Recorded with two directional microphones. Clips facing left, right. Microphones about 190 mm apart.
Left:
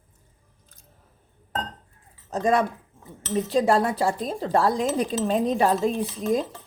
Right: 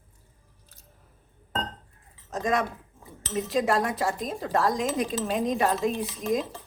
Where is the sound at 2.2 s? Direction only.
30° left (ahead or behind).